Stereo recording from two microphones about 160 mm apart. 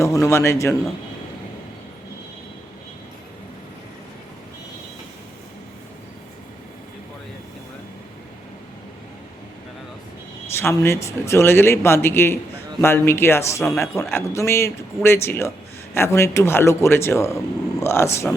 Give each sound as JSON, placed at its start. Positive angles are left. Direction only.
{"t": 0.0, "sound": "speech", "side_deg": 20}
{"t": 10.5, "sound": "speech", "side_deg": 15}